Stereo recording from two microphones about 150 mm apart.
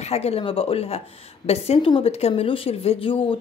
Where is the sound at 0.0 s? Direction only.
45° left (ahead or behind).